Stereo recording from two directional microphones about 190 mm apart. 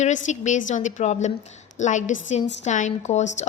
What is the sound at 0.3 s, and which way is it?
A woman's voice, 40° left (ahead or behind).